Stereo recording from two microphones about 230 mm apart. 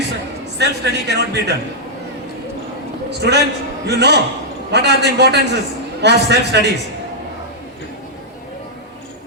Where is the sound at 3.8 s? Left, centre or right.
Right.